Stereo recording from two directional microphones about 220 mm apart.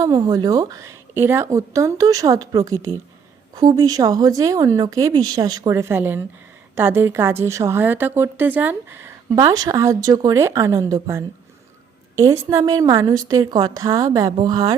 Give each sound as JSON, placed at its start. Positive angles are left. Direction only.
{"t": 0.0, "sound": "a woman's voice", "side_deg": -15}